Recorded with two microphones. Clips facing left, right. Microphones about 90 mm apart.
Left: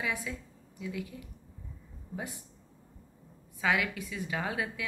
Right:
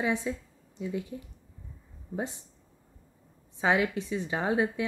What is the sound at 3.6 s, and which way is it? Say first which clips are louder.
A woman's voice: right 4 dB; 30° right (ahead or behind).